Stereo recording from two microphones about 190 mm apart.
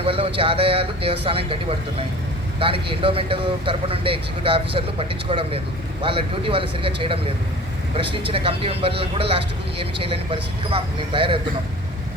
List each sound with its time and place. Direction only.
0.0 s speech: 30° right (ahead or behind)
2.6 s speech: 30° right (ahead or behind)
8.3 s speech: 30° right (ahead or behind)